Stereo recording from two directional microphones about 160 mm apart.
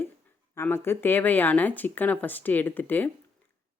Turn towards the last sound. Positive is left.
turn(degrees=10)  # may be behind; listen again after turning